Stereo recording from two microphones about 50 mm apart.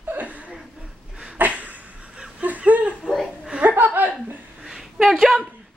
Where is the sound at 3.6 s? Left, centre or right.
Right.